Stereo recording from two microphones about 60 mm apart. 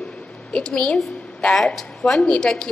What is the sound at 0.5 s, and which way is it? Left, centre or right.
A woman's voice, centre.